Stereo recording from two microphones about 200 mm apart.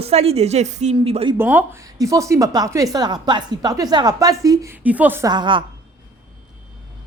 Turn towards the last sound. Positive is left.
turn(degrees=-20)  # may be behind; listen again after turning